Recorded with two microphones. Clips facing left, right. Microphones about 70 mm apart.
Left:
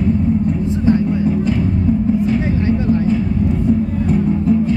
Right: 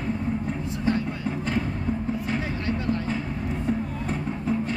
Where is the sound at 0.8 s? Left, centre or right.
Left.